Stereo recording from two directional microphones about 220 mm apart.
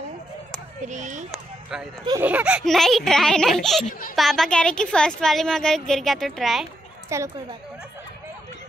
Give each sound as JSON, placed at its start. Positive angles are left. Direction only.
{"t": 0.8, "sound": "speech", "side_deg": -35}
{"t": 1.3, "sound": "run", "side_deg": -5}
{"t": 2.2, "sound": "speech", "side_deg": -5}
{"t": 7.1, "sound": "a woman's voice", "side_deg": -15}